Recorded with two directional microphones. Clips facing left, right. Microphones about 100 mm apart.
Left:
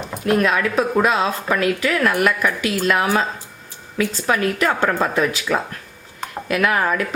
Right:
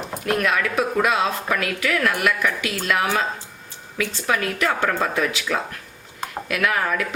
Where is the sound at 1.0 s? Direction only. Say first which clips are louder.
Left 2 dB; 30° left (ahead or behind).